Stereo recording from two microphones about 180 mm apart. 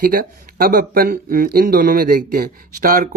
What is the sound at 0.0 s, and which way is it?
Speech, 55° right (ahead or behind).